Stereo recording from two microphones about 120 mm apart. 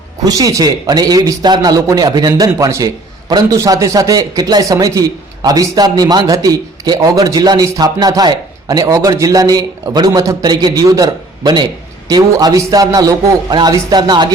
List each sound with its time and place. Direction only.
0.3 s a man's voice: 30° right (ahead or behind)